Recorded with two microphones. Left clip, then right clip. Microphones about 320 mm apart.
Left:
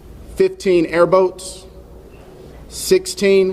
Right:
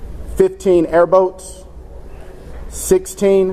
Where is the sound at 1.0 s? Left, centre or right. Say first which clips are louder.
Right 1 dB; centre.